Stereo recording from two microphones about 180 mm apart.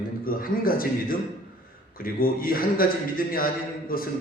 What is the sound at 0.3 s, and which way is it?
A man's voice, 50° left (ahead or behind).